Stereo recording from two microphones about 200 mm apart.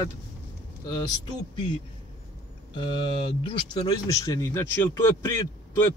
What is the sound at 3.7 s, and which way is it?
A man's voice, 25° left (ahead or behind).